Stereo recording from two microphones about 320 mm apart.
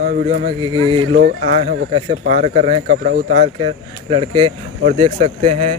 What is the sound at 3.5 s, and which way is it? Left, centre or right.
Speech, centre.